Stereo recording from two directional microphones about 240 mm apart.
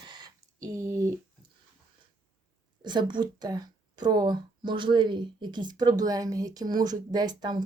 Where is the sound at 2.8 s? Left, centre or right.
Centre.